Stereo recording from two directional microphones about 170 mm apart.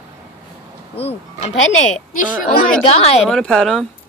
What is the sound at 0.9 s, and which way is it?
Speech, 40° left (ahead or behind).